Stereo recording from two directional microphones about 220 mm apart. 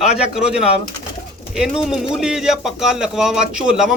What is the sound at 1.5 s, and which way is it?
Speech, 5° right (ahead or behind).